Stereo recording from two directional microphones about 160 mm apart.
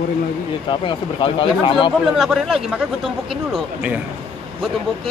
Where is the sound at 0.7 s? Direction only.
30° left (ahead or behind).